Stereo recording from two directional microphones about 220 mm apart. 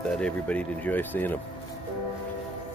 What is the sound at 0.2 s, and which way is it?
Speech, 5° left (ahead or behind).